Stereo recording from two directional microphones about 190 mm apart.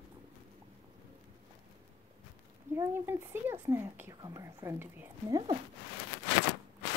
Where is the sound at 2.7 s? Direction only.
15° right (ahead or behind).